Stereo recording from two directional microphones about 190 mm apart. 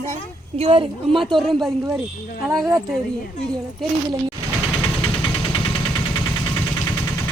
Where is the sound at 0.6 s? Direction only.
30° right (ahead or behind).